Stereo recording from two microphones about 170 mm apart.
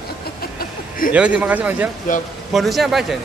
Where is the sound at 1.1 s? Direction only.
5° right (ahead or behind).